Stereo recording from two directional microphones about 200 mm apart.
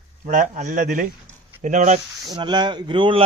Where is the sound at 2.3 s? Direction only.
20° right (ahead or behind).